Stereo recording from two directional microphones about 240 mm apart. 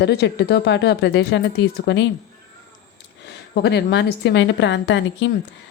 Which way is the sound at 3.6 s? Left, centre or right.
Left.